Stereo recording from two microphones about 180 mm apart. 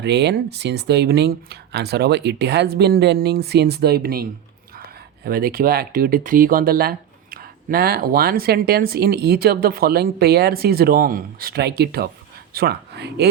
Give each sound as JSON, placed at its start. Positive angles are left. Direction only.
{"t": 0.0, "sound": "speech", "side_deg": -70}